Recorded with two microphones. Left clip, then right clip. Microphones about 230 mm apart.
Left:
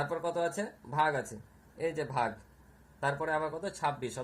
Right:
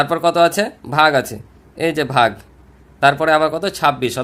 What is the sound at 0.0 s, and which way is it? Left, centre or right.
Speech, right.